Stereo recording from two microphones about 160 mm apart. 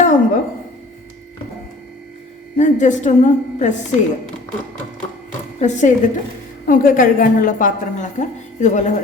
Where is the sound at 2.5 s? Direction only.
50° left (ahead or behind).